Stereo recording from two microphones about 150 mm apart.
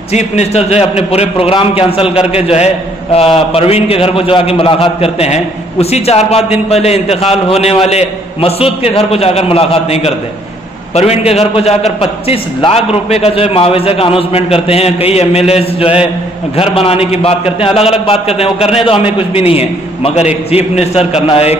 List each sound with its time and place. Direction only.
0.1 s a man's voice: 45° left (ahead or behind)